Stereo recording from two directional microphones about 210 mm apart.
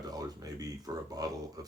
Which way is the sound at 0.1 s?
15° right (ahead or behind).